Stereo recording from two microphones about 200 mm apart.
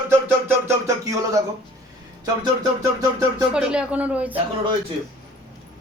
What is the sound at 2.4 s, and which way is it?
Speech, 15° right (ahead or behind).